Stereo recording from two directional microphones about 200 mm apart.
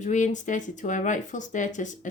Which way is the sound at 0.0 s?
40° left (ahead or behind).